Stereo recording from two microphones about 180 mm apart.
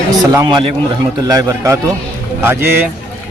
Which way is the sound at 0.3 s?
25° right (ahead or behind).